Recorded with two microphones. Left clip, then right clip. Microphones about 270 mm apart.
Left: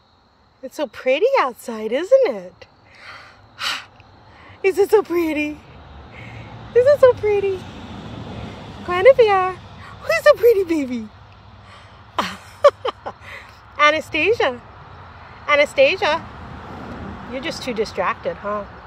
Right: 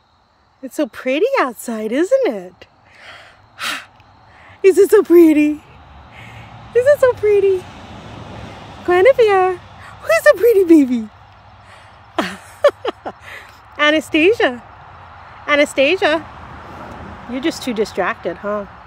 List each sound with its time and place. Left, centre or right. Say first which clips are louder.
0.7 s speech: even; right
3.0 s gasp: right 1 dB; right
4.6 s speech: right 5 dB; right
6.1 s a sound: right 1 dB; right
8.8 s speech: right 1 dB; right
12.2 s a sound: right 1 dB; right
15.4 s speech: right 1 dB; right
17.3 s speech: right 5 dB; right